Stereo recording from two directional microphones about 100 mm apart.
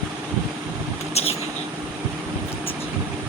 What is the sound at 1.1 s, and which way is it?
Vehicle, 90° left.